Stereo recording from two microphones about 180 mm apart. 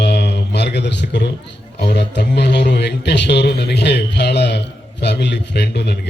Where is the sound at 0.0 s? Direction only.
70° left (ahead or behind).